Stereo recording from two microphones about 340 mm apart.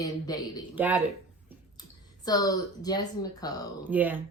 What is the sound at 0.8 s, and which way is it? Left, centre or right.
Speech, centre.